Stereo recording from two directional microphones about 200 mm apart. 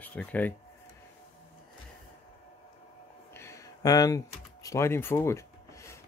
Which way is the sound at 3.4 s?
15° left (ahead or behind).